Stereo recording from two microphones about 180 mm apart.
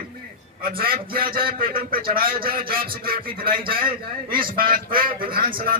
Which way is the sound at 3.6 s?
30° right (ahead or behind).